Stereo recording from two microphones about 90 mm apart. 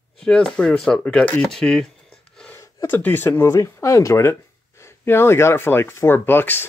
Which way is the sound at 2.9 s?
20° left (ahead or behind).